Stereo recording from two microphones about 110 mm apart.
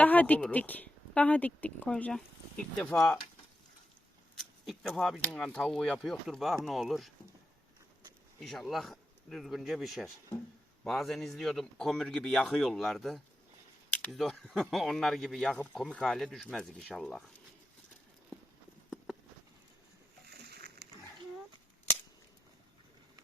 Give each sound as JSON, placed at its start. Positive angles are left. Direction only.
{"t": 0.0, "sound": "speech", "side_deg": 15}
{"t": 4.4, "sound": "speech", "side_deg": 0}
{"t": 8.4, "sound": "speech", "side_deg": 0}